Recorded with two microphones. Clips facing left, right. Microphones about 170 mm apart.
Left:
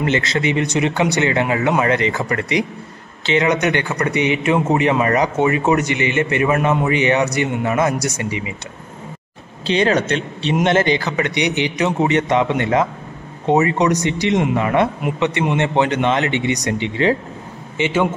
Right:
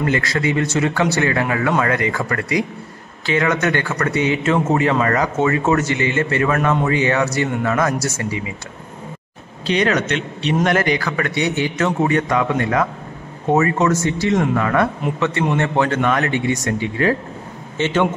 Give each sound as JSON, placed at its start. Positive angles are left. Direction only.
{"t": 0.0, "sound": "a man's voice", "side_deg": 20}
{"t": 9.7, "sound": "a man's voice", "side_deg": 30}